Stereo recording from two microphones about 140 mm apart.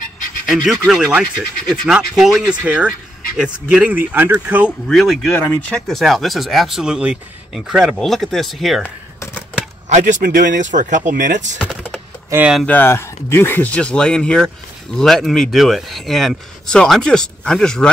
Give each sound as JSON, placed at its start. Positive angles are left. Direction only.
{"t": 0.7, "sound": "speech", "side_deg": -5}
{"t": 4.8, "sound": "speech", "side_deg": 0}
{"t": 8.8, "sound": "a sound", "side_deg": 15}
{"t": 9.8, "sound": "speech", "side_deg": -60}
{"t": 11.5, "sound": "speech", "side_deg": -5}
{"t": 12.6, "sound": "speech", "side_deg": 15}